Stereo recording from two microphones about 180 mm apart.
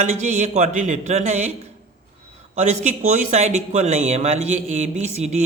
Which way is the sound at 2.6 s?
40° right (ahead or behind).